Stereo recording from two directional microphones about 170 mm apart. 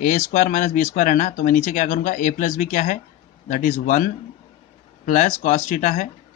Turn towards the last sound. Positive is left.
turn(degrees=45)  # may be behind; listen again after turning